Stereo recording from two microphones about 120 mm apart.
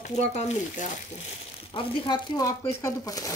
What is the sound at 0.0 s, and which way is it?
Speech, 70° left (ahead or behind).